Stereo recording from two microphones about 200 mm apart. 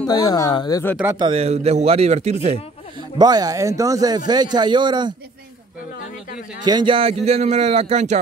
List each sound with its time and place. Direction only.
0.0 s speech: 20° left (ahead or behind)
1.1 s a man's voice: 25° right (ahead or behind)
3.2 s a man's voice: 20° right (ahead or behind)
6.6 s a man's voice: 20° right (ahead or behind)